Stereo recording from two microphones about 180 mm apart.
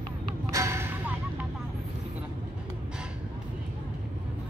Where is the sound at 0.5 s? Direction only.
15° right (ahead or behind).